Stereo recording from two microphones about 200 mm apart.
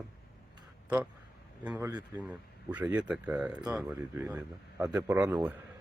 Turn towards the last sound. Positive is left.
turn(degrees=-5)  # may be behind; listen again after turning